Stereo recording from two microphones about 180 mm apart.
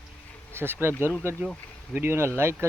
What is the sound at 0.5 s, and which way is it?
Speech, 10° right (ahead or behind).